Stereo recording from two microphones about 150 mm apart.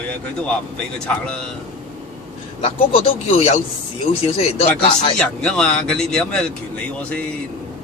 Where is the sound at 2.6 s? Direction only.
40° left (ahead or behind).